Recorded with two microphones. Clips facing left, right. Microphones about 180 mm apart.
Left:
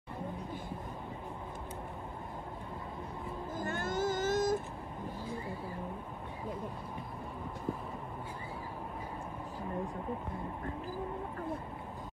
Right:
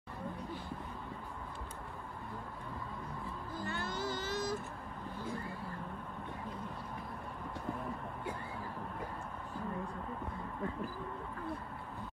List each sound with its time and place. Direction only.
3.5 s vehicle: 45° left (ahead or behind)